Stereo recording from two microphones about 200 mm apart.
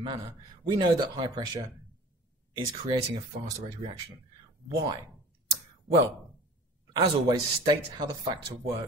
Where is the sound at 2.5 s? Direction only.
20° right (ahead or behind).